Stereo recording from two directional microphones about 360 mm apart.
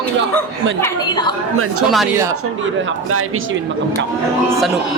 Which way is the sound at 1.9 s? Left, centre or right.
Centre.